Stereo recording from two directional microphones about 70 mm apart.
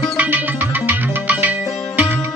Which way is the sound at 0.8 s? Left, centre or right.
Right.